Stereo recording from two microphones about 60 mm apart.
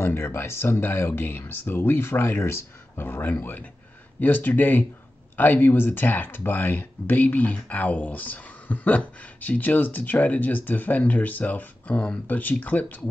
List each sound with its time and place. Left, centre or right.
0.0 s speech: left